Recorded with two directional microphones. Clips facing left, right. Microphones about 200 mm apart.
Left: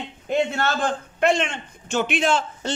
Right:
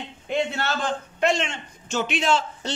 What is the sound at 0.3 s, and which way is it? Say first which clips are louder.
A man's voice: left 3 dB; 50° left (ahead or behind).